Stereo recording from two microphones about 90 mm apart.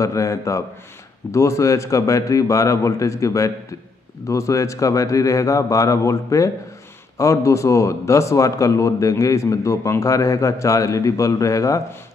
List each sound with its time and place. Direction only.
0.0 s a man's voice: 35° left (ahead or behind)